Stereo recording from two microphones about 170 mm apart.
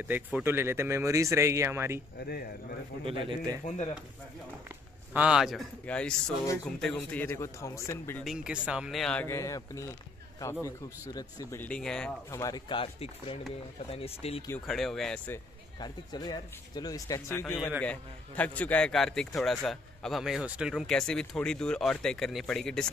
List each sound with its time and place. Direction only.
0.1 s speech: 10° right (ahead or behind)
3.1 s a man's voice: 30° right (ahead or behind)
3.6 s speech: 40° left (ahead or behind)
5.1 s a man's voice: 5° right (ahead or behind); by 8.2 s 15° left (ahead or behind)
8.2 s a man's voice: 5° right (ahead or behind); by 9.8 s 20° left (ahead or behind)
11.1 s speech: 20° left (ahead or behind)
11.6 s a man's voice: 5° left (ahead or behind)
12.3 s speech: 20° left (ahead or behind); by 14.4 s 35° left (ahead or behind)
14.7 s a man's voice: centre (ahead or behind)
15.8 s a man's voice: 25° left (ahead or behind); by 22.8 s 5° left (ahead or behind)